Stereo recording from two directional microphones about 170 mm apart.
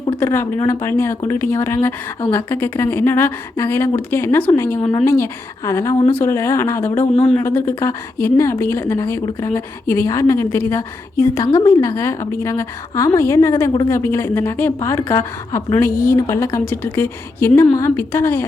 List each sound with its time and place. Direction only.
0.2 s a woman's voice: 15° left (ahead or behind)